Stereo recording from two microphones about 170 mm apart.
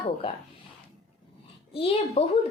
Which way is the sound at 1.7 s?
35° left (ahead or behind).